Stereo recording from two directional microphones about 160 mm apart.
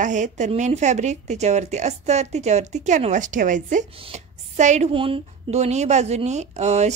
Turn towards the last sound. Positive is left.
turn(degrees=-45)  # may be behind; listen again after turning